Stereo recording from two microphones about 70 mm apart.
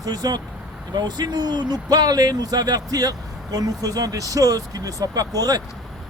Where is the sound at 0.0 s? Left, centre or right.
Right.